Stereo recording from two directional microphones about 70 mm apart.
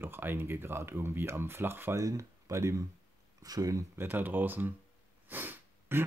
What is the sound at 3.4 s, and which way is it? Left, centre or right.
Speech, right.